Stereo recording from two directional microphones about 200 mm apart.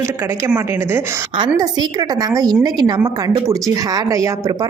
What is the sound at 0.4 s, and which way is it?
A woman's voice, 10° right (ahead or behind).